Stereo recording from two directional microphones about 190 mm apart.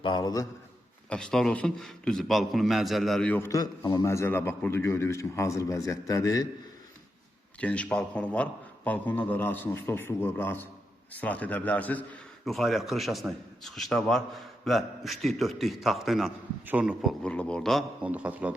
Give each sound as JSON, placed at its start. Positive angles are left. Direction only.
{"t": 0.0, "sound": "a man's voice", "side_deg": 25}
{"t": 1.1, "sound": "a man's voice", "side_deg": 5}
{"t": 7.6, "sound": "a man's voice", "side_deg": 5}